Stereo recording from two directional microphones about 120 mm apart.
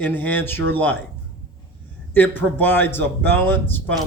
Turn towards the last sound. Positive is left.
turn(degrees=15)  # may be behind; listen again after turning